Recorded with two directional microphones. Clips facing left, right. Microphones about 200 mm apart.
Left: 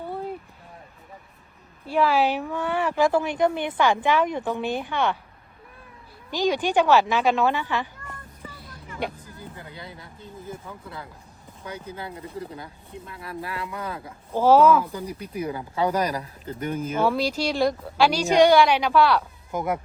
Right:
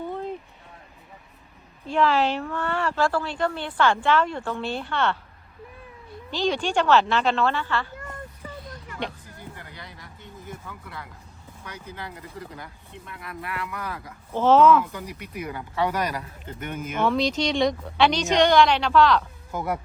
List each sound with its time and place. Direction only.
0.0 s a sound: 10° left (ahead or behind)
1.9 s speech: 10° left (ahead or behind)
6.3 s speech: 10° left (ahead or behind)
9.0 s speech: 5° left (ahead or behind)
9.6 s a sound: 25° left (ahead or behind)
11.6 s speech: 30° left (ahead or behind)
14.3 s speech: 10° left (ahead or behind)
14.8 s speech: 30° left (ahead or behind)
17.1 s speech: 5° left (ahead or behind)